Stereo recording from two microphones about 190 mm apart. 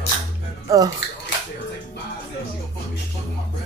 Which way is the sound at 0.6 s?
20° right (ahead or behind).